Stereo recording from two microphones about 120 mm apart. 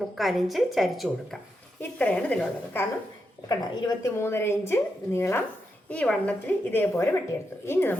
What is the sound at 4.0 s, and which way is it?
A woman's voice, 20° left (ahead or behind).